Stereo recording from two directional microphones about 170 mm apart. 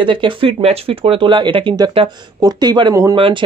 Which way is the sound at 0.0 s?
30° right (ahead or behind).